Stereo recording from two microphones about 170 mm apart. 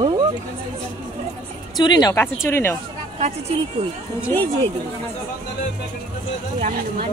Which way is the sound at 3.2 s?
40° right (ahead or behind).